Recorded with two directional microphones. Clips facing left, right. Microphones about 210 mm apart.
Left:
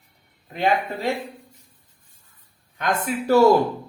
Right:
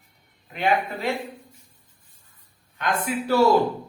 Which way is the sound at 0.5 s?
35° left (ahead or behind).